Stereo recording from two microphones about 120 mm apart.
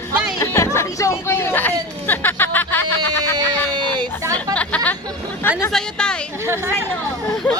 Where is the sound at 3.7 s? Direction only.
40° right (ahead or behind).